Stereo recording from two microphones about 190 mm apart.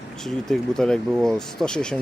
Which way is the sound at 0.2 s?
Centre (ahead or behind).